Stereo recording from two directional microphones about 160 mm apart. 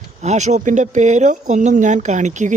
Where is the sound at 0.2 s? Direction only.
45° right (ahead or behind).